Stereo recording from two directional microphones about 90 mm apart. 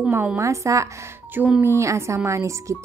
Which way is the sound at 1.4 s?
10° right (ahead or behind).